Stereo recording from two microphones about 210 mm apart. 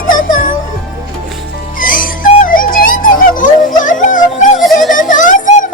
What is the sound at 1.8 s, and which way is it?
Music, 40° left (ahead or behind).